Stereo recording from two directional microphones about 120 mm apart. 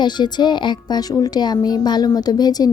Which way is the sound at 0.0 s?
40° left (ahead or behind).